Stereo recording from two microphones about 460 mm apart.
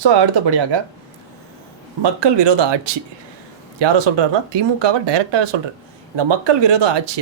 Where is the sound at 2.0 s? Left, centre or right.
Right.